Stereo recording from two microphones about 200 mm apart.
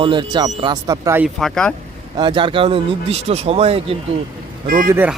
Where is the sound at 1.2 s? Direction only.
Centre (ahead or behind).